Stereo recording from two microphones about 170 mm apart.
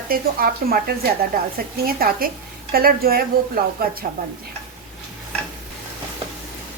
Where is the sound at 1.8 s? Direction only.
60° right (ahead or behind).